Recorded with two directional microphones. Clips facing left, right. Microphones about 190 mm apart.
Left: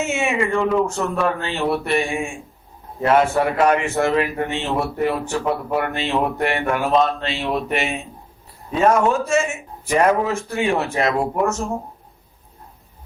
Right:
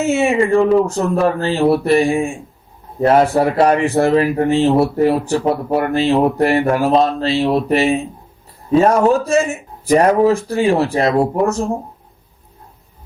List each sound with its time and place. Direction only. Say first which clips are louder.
0.0 s speech: right 6 dB; 35° right (ahead or behind)